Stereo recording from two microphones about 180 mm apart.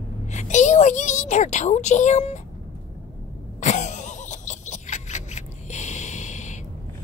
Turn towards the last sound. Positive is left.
turn(degrees=40)  # may be behind; listen again after turning